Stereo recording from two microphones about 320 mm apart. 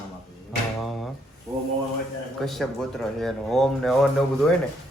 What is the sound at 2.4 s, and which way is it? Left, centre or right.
Speech, centre.